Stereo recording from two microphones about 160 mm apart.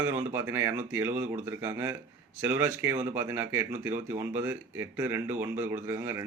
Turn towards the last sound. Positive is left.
turn(degrees=-15)  # may be behind; listen again after turning